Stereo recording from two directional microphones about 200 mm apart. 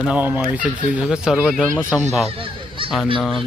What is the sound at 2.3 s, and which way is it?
Honk, 25° right (ahead or behind).